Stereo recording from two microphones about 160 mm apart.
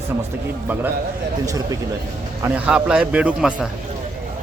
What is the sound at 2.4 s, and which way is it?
A man's voice, 5° right (ahead or behind).